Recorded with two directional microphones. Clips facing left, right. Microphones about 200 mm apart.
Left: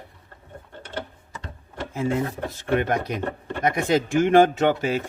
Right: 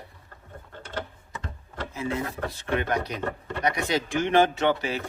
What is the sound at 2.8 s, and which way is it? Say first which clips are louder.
Speech: left 3 dB; 50° left (ahead or behind).